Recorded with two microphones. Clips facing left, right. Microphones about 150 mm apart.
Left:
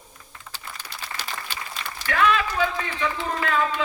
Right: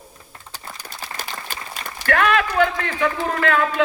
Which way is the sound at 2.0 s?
60° right (ahead or behind).